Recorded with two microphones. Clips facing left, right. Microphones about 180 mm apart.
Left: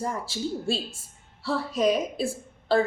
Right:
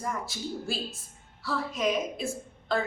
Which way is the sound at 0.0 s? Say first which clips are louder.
Left 4 dB; 30° left (ahead or behind).